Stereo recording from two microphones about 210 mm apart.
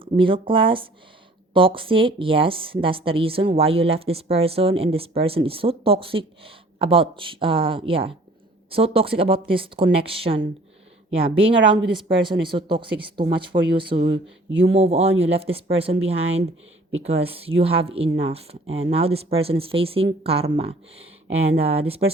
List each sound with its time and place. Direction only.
0.0 s a woman's voice: 25° right (ahead or behind)
13.9 s speech: 45° right (ahead or behind)
14.6 s a woman's voice: 30° right (ahead or behind)